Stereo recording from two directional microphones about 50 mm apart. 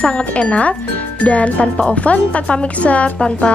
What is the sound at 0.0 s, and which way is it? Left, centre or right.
A woman's voice, left.